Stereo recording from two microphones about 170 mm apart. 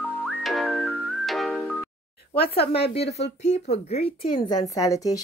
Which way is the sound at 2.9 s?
40° left (ahead or behind).